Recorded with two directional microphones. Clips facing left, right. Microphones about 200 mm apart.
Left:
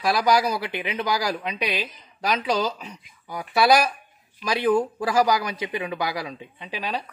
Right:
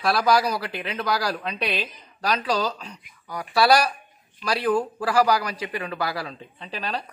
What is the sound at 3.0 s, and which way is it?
Speech, 20° left (ahead or behind).